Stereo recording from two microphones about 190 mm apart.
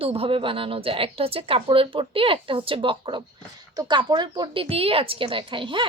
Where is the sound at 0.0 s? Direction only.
30° right (ahead or behind).